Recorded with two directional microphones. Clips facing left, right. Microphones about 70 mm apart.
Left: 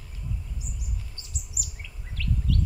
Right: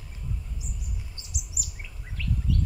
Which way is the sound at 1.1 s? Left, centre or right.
Right.